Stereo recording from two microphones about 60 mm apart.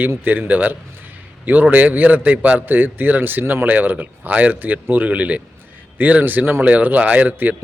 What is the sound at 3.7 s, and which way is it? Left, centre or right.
A man's voice, right.